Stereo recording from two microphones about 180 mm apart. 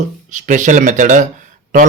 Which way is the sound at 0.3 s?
45° right (ahead or behind).